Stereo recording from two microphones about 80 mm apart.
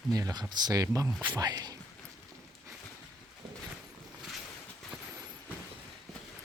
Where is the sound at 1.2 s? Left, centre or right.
Right.